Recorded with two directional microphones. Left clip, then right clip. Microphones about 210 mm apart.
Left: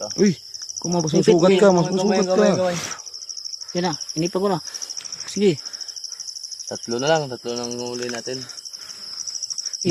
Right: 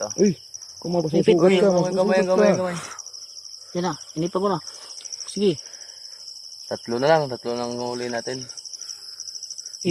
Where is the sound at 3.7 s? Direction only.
30° left (ahead or behind).